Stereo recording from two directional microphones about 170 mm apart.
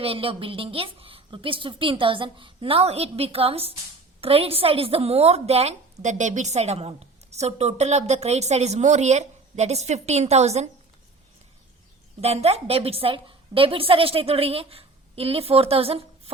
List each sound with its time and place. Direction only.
0.0 s a woman's voice: 35° right (ahead or behind)
12.2 s a woman's voice: 40° right (ahead or behind)